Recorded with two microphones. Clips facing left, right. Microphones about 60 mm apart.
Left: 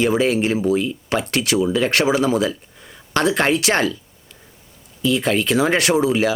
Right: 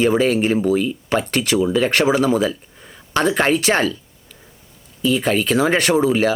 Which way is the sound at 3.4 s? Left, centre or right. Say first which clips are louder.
Right 1 dB; right.